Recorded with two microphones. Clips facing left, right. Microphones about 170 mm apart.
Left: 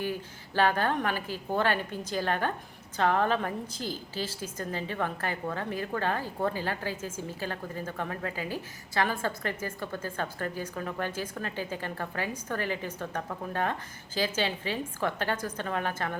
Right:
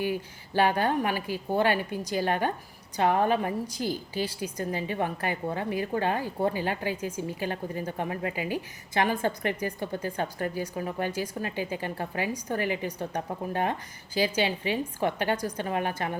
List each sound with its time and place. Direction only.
0.0 s a woman's voice: 15° right (ahead or behind)